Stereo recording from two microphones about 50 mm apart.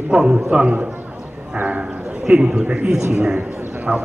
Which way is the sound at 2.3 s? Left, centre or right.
Centre.